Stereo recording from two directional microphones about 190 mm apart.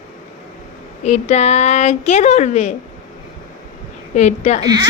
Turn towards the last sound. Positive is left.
turn(degrees=35)  # may be behind; listen again after turning